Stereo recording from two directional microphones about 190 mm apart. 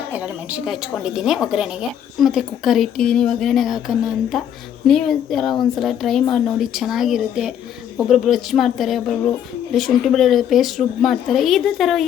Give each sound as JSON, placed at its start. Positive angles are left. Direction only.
{"t": 0.1, "sound": "speech", "side_deg": -5}